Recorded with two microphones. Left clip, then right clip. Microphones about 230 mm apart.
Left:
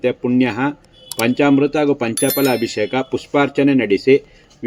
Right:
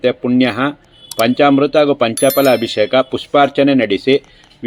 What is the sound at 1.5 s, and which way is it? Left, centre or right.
Speech, right.